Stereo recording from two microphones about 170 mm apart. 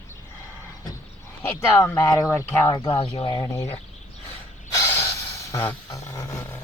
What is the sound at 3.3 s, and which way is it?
Speech, 15° left (ahead or behind).